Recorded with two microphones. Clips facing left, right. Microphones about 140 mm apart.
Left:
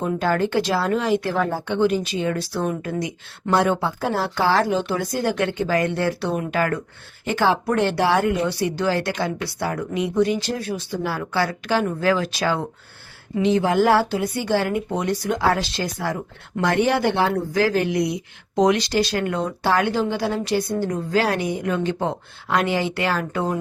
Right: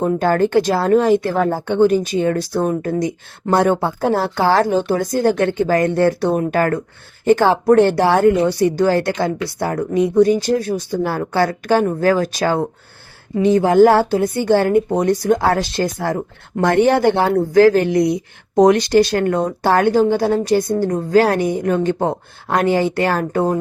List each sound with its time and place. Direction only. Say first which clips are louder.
0.0 s speech: right 6 dB; 50° right (ahead or behind)